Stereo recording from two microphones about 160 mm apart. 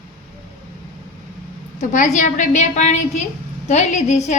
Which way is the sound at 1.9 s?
55° left (ahead or behind).